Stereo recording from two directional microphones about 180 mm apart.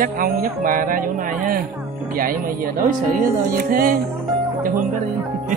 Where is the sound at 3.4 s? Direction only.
50° right (ahead or behind).